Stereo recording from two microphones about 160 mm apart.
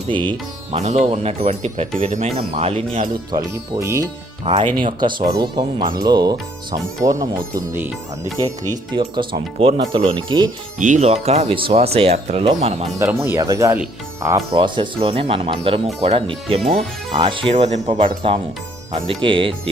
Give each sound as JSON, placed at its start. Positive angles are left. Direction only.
{"t": 0.1, "sound": "speech", "side_deg": -30}
{"t": 0.7, "sound": "speech", "side_deg": -45}
{"t": 3.3, "sound": "speech", "side_deg": -20}
{"t": 4.5, "sound": "speech", "side_deg": -30}
{"t": 10.8, "sound": "speech", "side_deg": -50}
{"t": 13.0, "sound": "speech", "side_deg": -15}
{"t": 14.5, "sound": "speech", "side_deg": -30}